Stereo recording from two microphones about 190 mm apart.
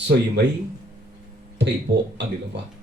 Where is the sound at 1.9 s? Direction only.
65° right (ahead or behind).